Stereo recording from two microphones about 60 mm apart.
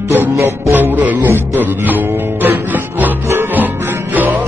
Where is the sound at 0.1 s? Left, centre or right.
Right.